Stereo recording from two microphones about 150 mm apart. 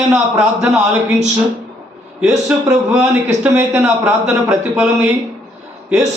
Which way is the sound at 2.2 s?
5° right (ahead or behind).